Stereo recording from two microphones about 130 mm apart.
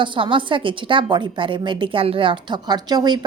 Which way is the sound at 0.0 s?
40° right (ahead or behind).